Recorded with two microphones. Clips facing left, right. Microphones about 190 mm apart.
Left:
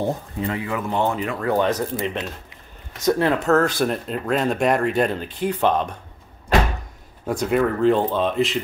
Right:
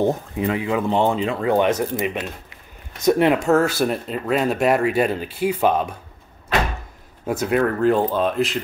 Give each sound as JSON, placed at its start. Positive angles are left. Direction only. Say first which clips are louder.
{"t": 0.0, "sound": "speech", "louder": "right 4 dB", "side_deg": -20}
{"t": 2.0, "sound": "speech", "louder": "right 1 dB", "side_deg": -10}
{"t": 7.2, "sound": "speech", "louder": "even", "side_deg": -5}